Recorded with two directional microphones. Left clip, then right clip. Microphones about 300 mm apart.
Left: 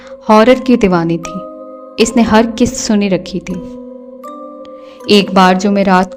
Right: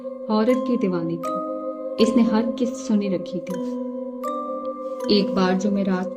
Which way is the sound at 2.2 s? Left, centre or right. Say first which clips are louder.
Left 11 dB; left.